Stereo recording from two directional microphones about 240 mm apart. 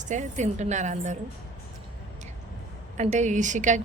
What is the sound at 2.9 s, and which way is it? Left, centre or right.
Speech, right.